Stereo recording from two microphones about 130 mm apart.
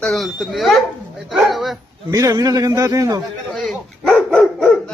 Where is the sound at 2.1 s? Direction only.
25° right (ahead or behind).